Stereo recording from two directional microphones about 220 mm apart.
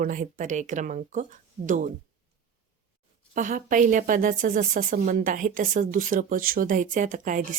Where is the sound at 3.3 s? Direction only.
35° right (ahead or behind).